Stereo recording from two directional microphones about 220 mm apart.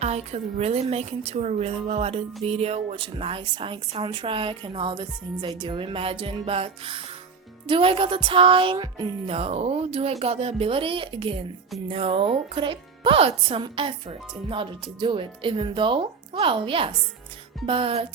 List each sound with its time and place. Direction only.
0.0 s a woman's voice: 30° right (ahead or behind)